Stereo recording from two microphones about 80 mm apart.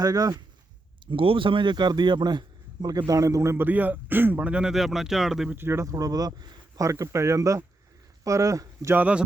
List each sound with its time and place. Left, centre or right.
0.0 s speech: right
1.1 s speech: right
2.8 s speech: right
3.7 s a man's voice: right
4.7 s speech: centre
5.5 s speech: right